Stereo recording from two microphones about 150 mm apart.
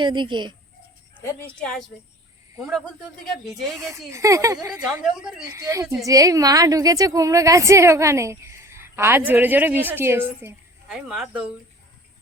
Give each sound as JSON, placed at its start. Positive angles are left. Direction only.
{"t": 0.0, "sound": "speech", "side_deg": -30}
{"t": 1.5, "sound": "a woman's voice", "side_deg": 5}
{"t": 3.2, "sound": "speech", "side_deg": 0}
{"t": 4.1, "sound": "a woman's voice", "side_deg": -20}
{"t": 10.8, "sound": "speech", "side_deg": -5}